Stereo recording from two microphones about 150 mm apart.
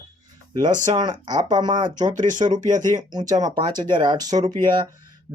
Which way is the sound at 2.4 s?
30° right (ahead or behind).